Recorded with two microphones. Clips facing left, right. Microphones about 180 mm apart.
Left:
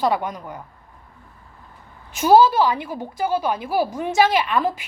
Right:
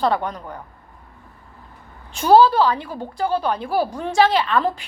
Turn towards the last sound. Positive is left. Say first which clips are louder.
# right 1 dB
turn(degrees=15)  # may be behind; listen again after turning